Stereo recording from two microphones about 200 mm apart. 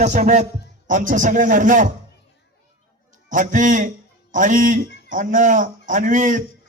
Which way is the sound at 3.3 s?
40° right (ahead or behind).